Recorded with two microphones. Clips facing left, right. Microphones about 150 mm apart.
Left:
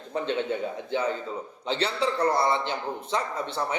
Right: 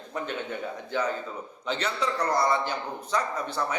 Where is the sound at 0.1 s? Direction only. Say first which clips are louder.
Left 5 dB; 30° left (ahead or behind).